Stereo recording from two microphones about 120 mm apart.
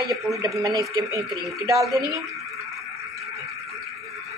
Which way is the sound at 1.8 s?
Centre (ahead or behind).